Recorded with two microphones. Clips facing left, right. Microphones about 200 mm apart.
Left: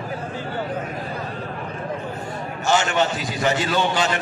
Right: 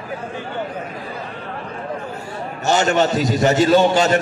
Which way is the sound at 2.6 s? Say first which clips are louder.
Right 4 dB; 40° right (ahead or behind).